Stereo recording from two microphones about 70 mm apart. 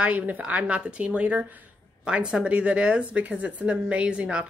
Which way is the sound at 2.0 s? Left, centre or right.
Centre.